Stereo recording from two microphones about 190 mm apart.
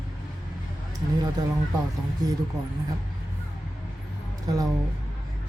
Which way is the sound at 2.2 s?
20° right (ahead or behind).